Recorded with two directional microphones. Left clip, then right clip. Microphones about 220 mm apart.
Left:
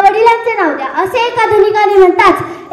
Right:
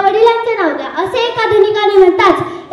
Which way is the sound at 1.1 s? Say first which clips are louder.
Left 1 dB; 30° left (ahead or behind).